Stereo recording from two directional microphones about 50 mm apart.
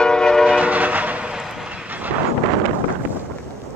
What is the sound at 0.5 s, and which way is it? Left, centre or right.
Train, right.